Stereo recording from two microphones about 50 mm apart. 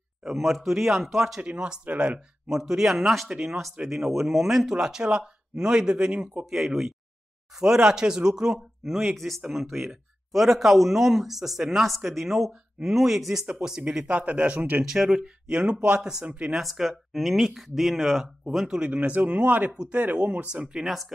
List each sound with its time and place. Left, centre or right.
0.2 s speech: centre
1.4 s speech: right
6.5 s speech: centre
9.1 s speech: centre
14.0 s speech: right
14.9 s speech: centre
16.7 s speech: centre
18.9 s speech: right
20.8 s speech: centre